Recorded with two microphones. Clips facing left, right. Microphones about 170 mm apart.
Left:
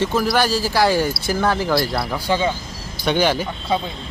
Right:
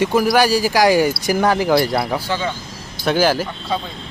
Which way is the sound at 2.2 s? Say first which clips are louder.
Left 3 dB; 15° left (ahead or behind).